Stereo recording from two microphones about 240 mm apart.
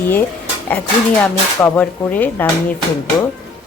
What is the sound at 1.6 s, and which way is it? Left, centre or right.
Speech, centre.